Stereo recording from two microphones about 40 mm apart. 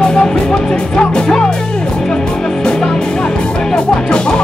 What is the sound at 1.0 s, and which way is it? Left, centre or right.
Music, centre.